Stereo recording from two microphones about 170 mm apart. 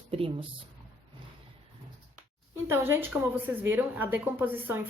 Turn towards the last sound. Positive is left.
turn(degrees=-10)  # may be behind; listen again after turning